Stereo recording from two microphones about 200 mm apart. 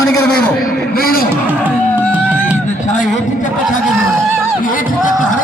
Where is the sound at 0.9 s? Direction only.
45° left (ahead or behind).